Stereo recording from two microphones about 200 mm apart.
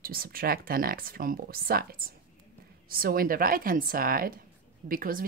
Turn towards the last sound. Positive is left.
turn(degrees=-45)  # may be behind; listen again after turning